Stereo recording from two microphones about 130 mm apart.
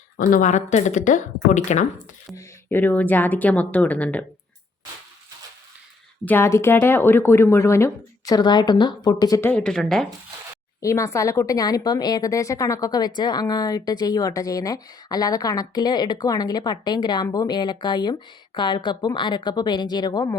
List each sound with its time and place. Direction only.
0.2 s speech: 90° left; by 1.9 s 65° left (ahead or behind)
2.6 s speech: 15° left (ahead or behind)
6.2 s speech: 15° left (ahead or behind)
9.4 s speech: 10° left (ahead or behind)
10.8 s speech: 25° left (ahead or behind)